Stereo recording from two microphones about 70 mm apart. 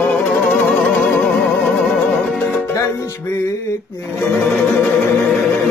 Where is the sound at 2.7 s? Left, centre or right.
Left.